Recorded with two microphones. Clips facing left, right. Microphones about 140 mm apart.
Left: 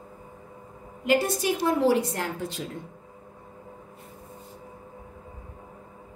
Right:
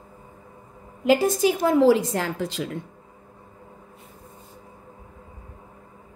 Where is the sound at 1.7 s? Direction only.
90° right.